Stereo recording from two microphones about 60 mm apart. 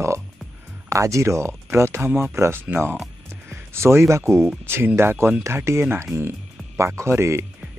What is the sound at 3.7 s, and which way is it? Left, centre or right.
Speech, right.